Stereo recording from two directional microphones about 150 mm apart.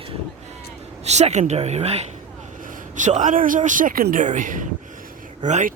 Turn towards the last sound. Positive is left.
turn(degrees=-55)  # may be behind; listen again after turning